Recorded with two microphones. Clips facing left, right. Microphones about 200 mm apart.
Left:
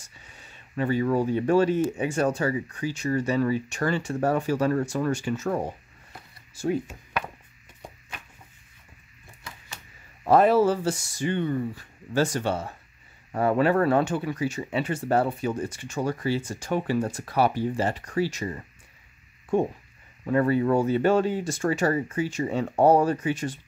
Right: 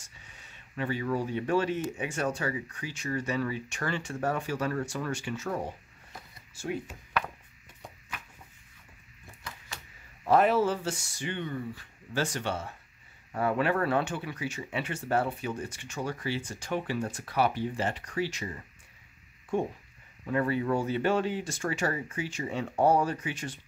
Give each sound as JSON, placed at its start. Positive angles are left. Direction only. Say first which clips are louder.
{"t": 0.7, "sound": "speech", "louder": "left 7 dB", "side_deg": 40}
{"t": 6.5, "sound": "speech", "louder": "left 8 dB", "side_deg": 40}
{"t": 10.2, "sound": "speech", "louder": "left 5 dB", "side_deg": 40}
{"t": 20.2, "sound": "speech", "louder": "left 6 dB", "side_deg": 45}